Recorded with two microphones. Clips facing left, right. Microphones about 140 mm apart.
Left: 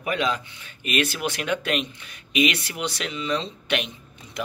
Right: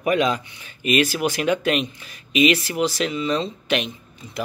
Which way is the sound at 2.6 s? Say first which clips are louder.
Right 8 dB; 35° right (ahead or behind).